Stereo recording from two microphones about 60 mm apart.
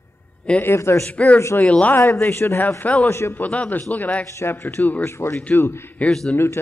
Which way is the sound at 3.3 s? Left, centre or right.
Left.